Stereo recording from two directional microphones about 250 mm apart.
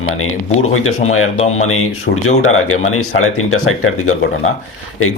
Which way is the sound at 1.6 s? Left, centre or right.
Left.